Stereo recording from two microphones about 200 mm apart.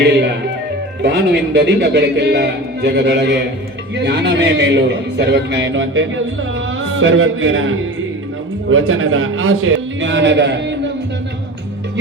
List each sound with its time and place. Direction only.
1.0 s a man's voice: 55° right (ahead or behind); by 7.8 s 75° right (ahead or behind)
8.7 s a man's voice: 90° right; by 10.8 s 60° right (ahead or behind)